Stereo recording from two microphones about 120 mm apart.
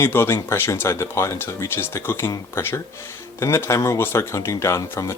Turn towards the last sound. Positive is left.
turn(degrees=25)  # may be behind; listen again after turning